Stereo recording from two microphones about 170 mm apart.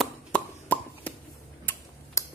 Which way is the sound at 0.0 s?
10° left (ahead or behind).